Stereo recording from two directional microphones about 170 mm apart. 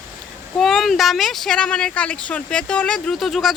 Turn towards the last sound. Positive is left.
turn(degrees=0)  # may be behind; listen again after turning